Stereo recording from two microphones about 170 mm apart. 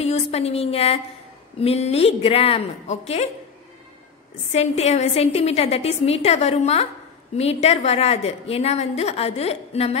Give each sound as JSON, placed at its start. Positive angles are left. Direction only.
{"t": 0.0, "sound": "a woman's voice", "side_deg": 40}
{"t": 4.5, "sound": "a woman's voice", "side_deg": 40}